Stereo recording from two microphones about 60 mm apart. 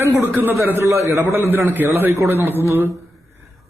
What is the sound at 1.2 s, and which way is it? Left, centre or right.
A man's voice, right.